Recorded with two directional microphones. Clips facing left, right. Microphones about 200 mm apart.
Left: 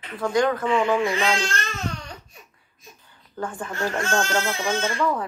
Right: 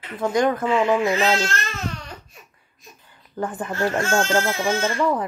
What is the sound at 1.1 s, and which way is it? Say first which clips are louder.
Speech: right 3 dB; 5° right (ahead or behind).